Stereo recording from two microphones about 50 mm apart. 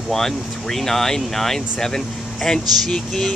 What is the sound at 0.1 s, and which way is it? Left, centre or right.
Speech, centre.